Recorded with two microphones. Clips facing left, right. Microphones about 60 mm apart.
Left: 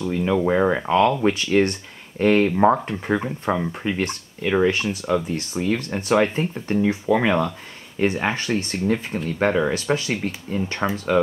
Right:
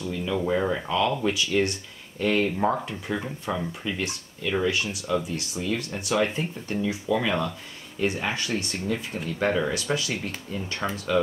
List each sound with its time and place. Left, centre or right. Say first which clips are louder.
0.0 s speech: left 7 dB; left